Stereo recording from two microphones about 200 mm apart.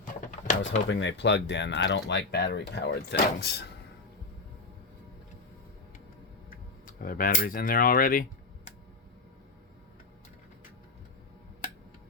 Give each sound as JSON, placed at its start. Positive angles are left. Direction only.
{"t": 0.0, "sound": "drawer open or close", "side_deg": 40}
{"t": 0.9, "sound": "speech", "side_deg": 65}
{"t": 6.5, "sound": "speech", "side_deg": 45}